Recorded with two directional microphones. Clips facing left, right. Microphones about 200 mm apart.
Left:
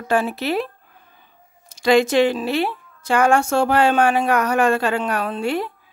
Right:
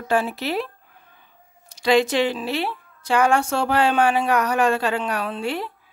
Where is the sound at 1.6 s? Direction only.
45° left (ahead or behind).